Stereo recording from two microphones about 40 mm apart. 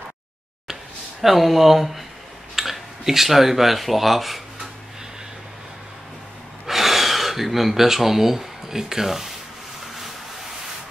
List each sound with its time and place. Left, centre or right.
1.2 s speech: centre
6.6 s speech: centre